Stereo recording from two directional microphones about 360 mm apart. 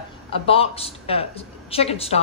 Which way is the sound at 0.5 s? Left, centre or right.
Centre.